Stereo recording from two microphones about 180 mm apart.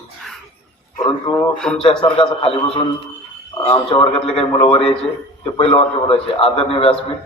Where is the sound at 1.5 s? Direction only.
5° left (ahead or behind).